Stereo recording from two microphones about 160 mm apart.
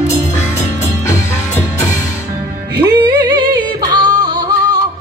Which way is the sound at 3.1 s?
25° right (ahead or behind).